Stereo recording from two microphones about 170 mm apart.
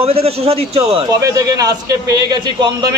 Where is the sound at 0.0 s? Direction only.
35° right (ahead or behind).